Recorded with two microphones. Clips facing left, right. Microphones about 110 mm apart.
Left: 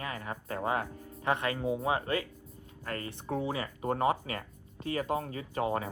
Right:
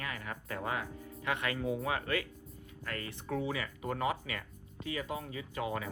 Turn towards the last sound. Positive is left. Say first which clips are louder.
# left 5 dB
turn(degrees=40)  # may be behind; listen again after turning